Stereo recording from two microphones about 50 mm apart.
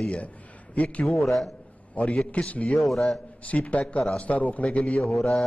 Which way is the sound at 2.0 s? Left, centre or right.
Left.